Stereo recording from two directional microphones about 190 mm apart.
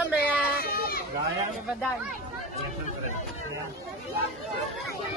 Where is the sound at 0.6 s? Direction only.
50° left (ahead or behind).